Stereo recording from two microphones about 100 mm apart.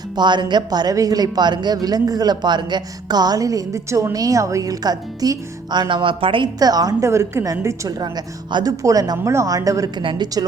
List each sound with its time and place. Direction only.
0.2 s speech: 50° right (ahead or behind)
5.9 s a woman's voice: 55° right (ahead or behind)
6.6 s speech: 40° right (ahead or behind)
7.1 s a woman's voice: 30° right (ahead or behind)
7.9 s speech: 40° right (ahead or behind)
8.7 s speech: 35° right (ahead or behind)
10.0 s a woman's voice: 60° right (ahead or behind)